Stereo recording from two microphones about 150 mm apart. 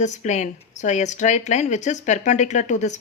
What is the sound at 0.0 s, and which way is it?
A woman's voice, 50° left (ahead or behind).